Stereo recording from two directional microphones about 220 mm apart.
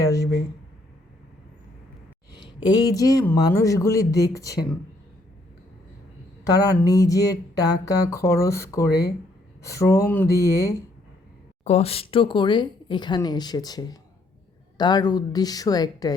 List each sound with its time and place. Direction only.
0.0 s a sound: 15° left (ahead or behind)
2.6 s speech: 15° left (ahead or behind)
6.4 s speech: 15° left (ahead or behind)
11.6 s speech: 30° left (ahead or behind)